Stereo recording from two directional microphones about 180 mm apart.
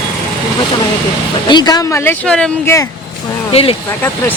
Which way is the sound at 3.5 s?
35° left (ahead or behind).